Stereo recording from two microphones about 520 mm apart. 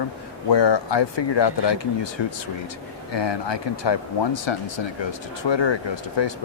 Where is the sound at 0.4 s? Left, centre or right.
Left.